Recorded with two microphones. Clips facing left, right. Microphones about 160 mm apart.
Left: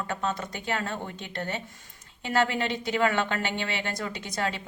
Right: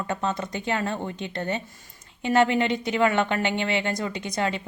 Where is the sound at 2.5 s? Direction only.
55° right (ahead or behind).